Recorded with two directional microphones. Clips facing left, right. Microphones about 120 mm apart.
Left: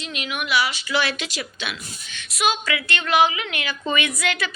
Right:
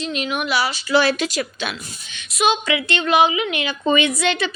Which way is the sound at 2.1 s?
20° right (ahead or behind).